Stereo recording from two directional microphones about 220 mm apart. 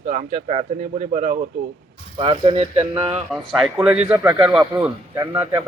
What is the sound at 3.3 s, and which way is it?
A man's voice, 5° right (ahead or behind).